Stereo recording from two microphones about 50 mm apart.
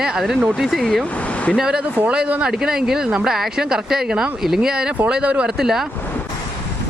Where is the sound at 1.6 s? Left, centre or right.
Centre.